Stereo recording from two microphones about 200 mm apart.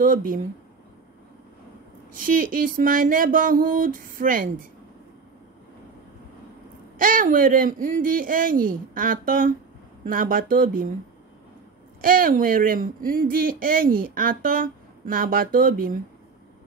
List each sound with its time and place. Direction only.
0.0 s speech: 45° right (ahead or behind)
2.1 s speech: 45° right (ahead or behind)
7.0 s speech: 45° right (ahead or behind)
12.0 s speech: 45° right (ahead or behind)